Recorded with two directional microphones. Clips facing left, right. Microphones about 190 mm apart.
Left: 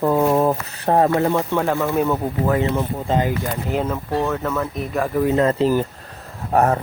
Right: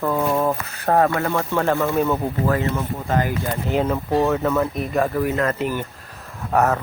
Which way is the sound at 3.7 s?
5° right (ahead or behind).